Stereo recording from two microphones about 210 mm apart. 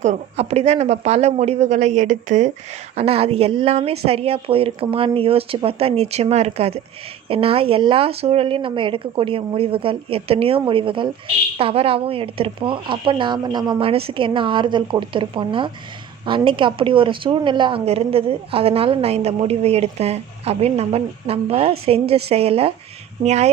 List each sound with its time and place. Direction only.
0.0 s a woman's voice: 30° right (ahead or behind)